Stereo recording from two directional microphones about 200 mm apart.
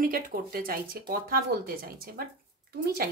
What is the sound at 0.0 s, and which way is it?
Speech, 45° right (ahead or behind).